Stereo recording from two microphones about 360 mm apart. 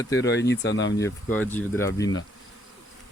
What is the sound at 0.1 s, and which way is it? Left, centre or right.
Speech, left.